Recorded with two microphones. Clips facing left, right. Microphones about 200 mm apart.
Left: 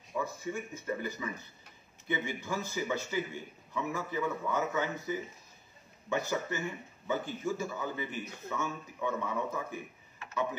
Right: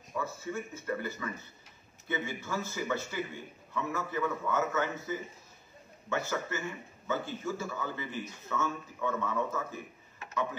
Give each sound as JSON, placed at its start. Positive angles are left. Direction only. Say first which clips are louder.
{"t": 0.1, "sound": "a man's voice", "louder": "left 1 dB", "side_deg": 15}